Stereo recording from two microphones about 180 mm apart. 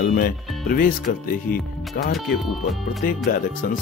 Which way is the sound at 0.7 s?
55° left (ahead or behind).